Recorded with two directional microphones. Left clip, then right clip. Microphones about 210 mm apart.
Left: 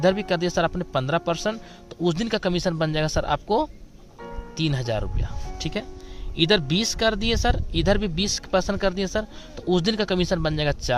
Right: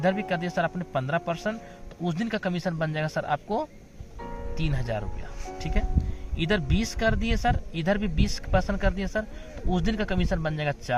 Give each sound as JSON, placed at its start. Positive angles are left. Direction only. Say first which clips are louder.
{"t": 0.0, "sound": "speech", "louder": "left 5 dB", "side_deg": 60}
{"t": 6.3, "sound": "speech", "louder": "left 7 dB", "side_deg": 65}